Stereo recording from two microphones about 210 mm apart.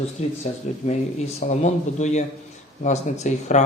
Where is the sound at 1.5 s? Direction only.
35° left (ahead or behind).